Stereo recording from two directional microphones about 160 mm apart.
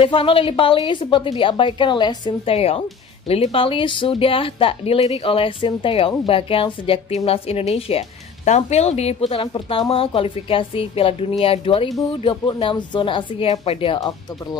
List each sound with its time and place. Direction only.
0.0 s speech: 35° left (ahead or behind)